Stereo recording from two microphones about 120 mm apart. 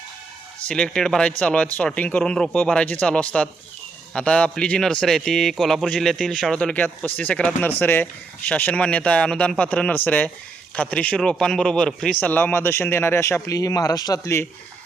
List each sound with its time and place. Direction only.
0.7 s a man's voice: 5° left (ahead or behind); by 14.4 s 25° left (ahead or behind)